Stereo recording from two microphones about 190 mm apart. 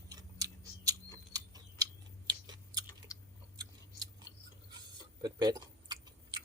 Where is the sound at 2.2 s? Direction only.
20° right (ahead or behind).